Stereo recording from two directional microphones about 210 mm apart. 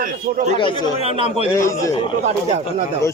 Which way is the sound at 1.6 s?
15° left (ahead or behind).